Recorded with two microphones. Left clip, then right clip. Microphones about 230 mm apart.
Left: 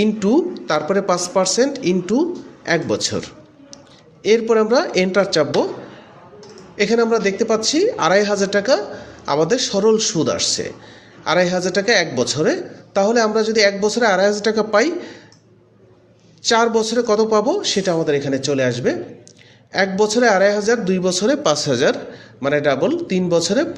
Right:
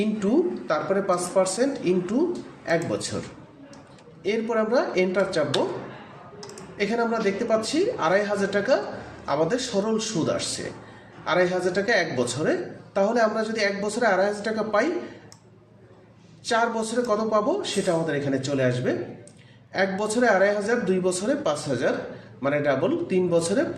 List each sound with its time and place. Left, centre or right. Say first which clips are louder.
0.2 s speech: left 6 dB; left
4.2 s speech: left 10 dB; left
6.7 s speech: left 8 dB; left
16.5 s speech: left 8 dB; left